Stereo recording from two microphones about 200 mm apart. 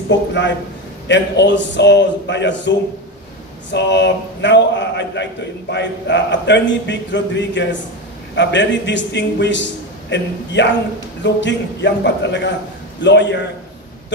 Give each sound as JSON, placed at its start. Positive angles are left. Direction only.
{"t": 0.1, "sound": "a man's voice", "side_deg": 65}
{"t": 3.7, "sound": "a man's voice", "side_deg": 60}